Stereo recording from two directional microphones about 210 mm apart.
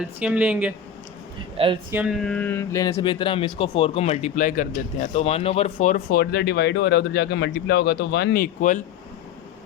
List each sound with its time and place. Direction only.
0.0 s speech: 5° right (ahead or behind)
1.5 s speech: 25° right (ahead or behind)
1.9 s speech: 5° right (ahead or behind); by 8.8 s 40° left (ahead or behind)